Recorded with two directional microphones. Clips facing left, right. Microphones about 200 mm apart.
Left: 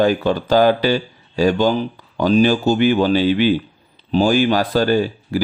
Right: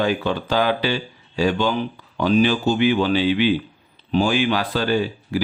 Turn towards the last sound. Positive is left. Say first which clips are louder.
# left 3 dB
turn(degrees=45)  # may be behind; listen again after turning